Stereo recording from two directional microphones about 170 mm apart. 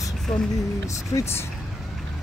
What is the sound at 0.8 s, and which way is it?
Speech, 20° left (ahead or behind).